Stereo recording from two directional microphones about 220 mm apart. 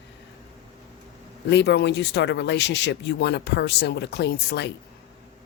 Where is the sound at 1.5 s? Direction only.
50° left (ahead or behind).